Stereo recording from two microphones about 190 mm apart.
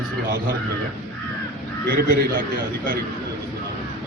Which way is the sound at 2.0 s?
50° right (ahead or behind).